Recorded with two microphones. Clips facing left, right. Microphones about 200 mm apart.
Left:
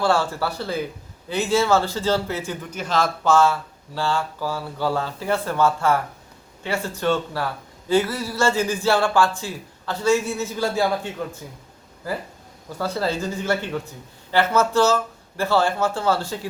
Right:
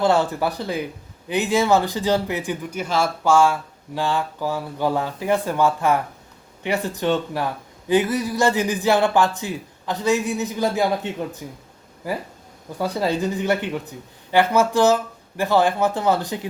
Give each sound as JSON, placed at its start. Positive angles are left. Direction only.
{"t": 0.0, "sound": "speech", "side_deg": -20}
{"t": 12.8, "sound": "speech", "side_deg": -15}